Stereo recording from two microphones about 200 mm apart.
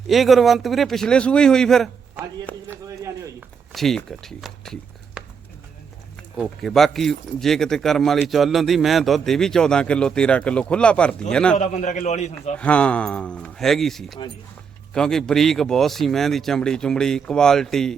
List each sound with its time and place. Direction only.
0.1 s speech: centre (ahead or behind)
2.6 s a man's voice: 15° right (ahead or behind)
3.7 s speech: centre (ahead or behind)
6.3 s speech: centre (ahead or behind)
11.5 s a man's voice: 40° left (ahead or behind)
12.5 s speech: 5° left (ahead or behind)